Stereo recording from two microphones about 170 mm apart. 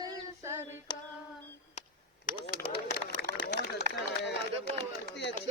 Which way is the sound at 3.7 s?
80° left.